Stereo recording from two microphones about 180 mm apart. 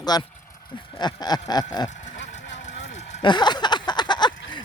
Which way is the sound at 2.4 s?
90° left.